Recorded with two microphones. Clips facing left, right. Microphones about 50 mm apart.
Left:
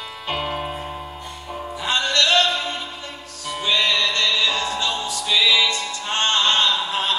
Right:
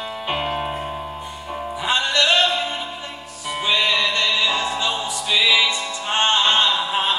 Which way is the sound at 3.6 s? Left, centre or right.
Centre.